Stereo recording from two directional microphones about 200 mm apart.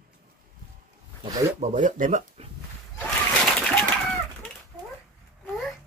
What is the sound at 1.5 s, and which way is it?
Speech, 40° right (ahead or behind).